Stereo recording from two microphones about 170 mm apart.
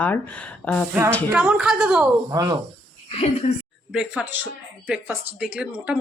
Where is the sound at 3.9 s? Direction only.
5° right (ahead or behind).